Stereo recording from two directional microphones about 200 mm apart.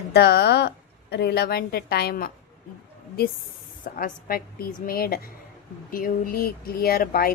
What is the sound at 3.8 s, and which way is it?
Speech, 45° left (ahead or behind).